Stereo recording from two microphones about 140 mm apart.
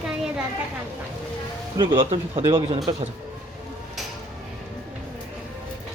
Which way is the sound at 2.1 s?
50° right (ahead or behind).